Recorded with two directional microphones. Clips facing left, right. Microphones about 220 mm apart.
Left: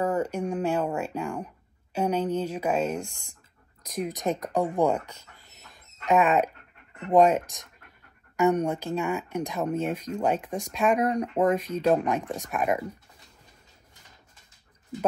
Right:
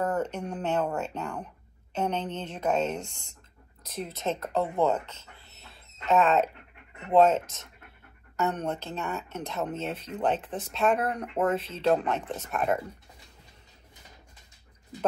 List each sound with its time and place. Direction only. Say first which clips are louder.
0.0 s speech: left 3 dB; 10° left (ahead or behind)
6.0 s speech: left 1 dB; 15° left (ahead or behind)